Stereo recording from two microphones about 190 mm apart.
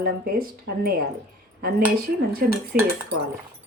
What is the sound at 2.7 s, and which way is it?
Speech, 50° right (ahead or behind).